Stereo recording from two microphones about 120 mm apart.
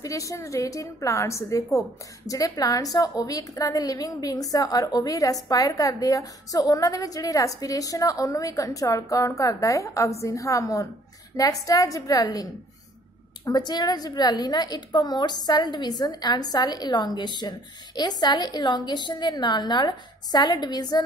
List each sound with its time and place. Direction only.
0.0 s a woman's voice: 30° left (ahead or behind)
13.5 s a woman's voice: 35° left (ahead or behind)